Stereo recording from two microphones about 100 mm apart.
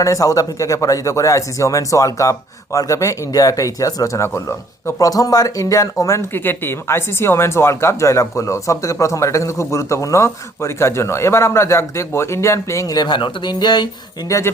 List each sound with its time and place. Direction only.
0.0 s speech: 35° left (ahead or behind)
14.3 s speech: 30° left (ahead or behind)